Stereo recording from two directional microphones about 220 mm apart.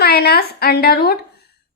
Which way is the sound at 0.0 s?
45° left (ahead or behind).